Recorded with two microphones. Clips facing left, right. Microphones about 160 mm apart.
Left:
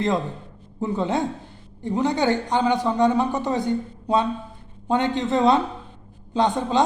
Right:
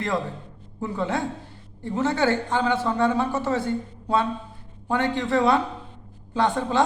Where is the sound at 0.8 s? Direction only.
20° left (ahead or behind).